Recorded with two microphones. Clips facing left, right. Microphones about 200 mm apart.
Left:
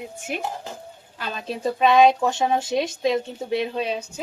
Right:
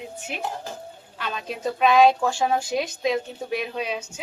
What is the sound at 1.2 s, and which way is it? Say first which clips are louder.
Speech: left 2 dB; 35° left (ahead or behind).